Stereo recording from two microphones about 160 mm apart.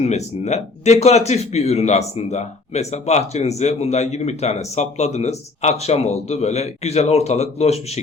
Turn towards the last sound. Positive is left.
turn(degrees=40)  # may be behind; listen again after turning